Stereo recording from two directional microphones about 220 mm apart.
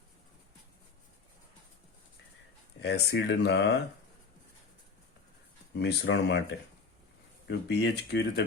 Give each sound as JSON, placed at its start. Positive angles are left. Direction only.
{"t": 2.8, "sound": "speech", "side_deg": 50}
{"t": 5.8, "sound": "speech", "side_deg": 55}